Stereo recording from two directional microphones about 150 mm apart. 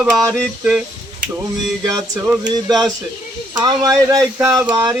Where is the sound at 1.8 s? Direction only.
25° right (ahead or behind).